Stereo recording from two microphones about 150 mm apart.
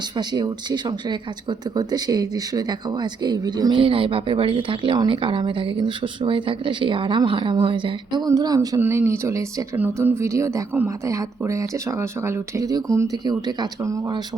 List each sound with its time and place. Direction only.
0.2 s speech: 30° right (ahead or behind)